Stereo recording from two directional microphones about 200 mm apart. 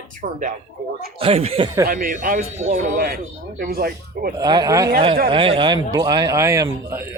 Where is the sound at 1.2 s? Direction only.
30° right (ahead or behind).